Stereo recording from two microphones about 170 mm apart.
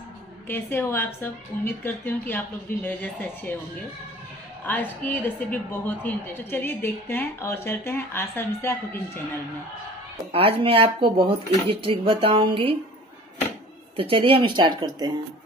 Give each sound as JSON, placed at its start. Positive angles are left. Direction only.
{"t": 0.5, "sound": "a woman's voice", "side_deg": 15}
{"t": 4.6, "sound": "a woman's voice", "side_deg": 10}
{"t": 10.3, "sound": "speech", "side_deg": -30}
{"t": 13.9, "sound": "speech", "side_deg": -30}